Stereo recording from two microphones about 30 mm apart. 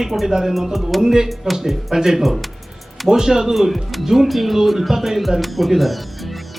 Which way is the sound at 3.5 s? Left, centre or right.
Centre.